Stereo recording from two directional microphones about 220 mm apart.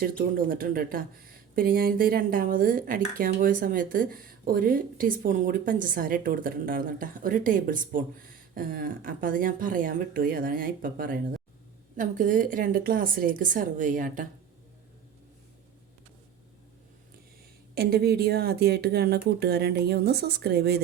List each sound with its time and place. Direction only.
0.2 s speech: 40° right (ahead or behind)
17.7 s a woman's voice: 45° right (ahead or behind)